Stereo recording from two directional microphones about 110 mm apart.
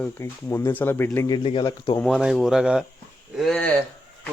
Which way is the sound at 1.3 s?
50° left (ahead or behind).